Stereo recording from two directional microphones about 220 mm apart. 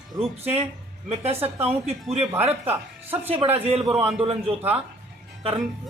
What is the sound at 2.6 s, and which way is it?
Speech, 10° right (ahead or behind).